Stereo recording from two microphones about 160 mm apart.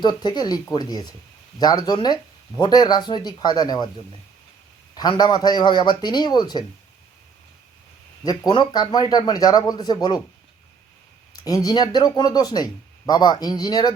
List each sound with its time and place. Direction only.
0.0 s a man's voice: 25° left (ahead or behind)
4.9 s a man's voice: 25° left (ahead or behind)
8.2 s a man's voice: 25° left (ahead or behind)
11.4 s a man's voice: 25° left (ahead or behind)